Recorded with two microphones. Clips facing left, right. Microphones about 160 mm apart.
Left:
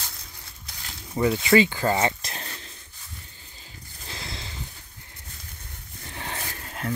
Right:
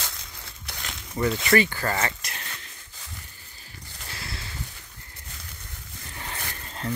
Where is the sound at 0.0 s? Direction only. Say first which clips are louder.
Right 4 dB; 90° right.